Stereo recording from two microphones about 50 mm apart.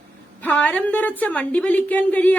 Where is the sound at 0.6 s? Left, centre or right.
Left.